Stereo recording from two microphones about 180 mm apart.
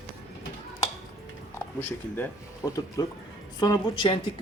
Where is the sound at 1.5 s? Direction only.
10° left (ahead or behind).